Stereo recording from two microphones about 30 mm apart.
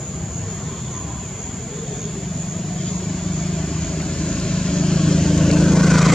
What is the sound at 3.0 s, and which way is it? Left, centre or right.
Vehicle, centre.